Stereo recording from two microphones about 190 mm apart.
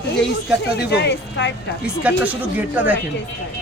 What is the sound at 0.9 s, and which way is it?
Speech, 60° left (ahead or behind).